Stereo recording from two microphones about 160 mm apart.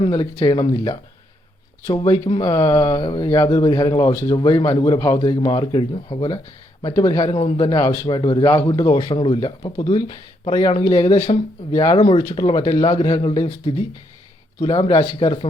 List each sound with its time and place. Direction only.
0.1 s speech: 20° left (ahead or behind)
2.4 s speech: 20° left (ahead or behind)
7.3 s speech: 35° left (ahead or behind)